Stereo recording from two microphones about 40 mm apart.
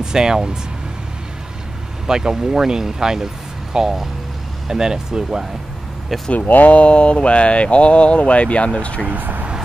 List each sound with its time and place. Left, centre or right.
0.0 s speech: centre
2.0 s speech: centre
6.4 s speech: left
9.0 s speech: right